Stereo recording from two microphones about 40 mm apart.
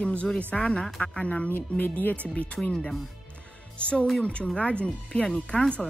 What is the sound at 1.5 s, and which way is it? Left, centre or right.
Speech, left.